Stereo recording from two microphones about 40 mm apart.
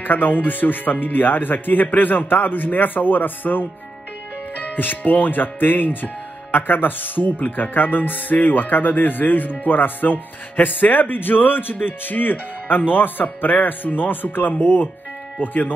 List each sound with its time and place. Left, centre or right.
0.0 s speech: left
15.4 s speech: left